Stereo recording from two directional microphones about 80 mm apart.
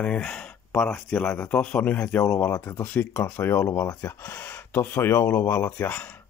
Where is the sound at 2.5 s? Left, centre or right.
Left.